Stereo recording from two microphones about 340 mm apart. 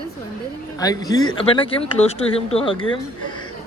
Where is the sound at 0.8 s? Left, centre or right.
Centre.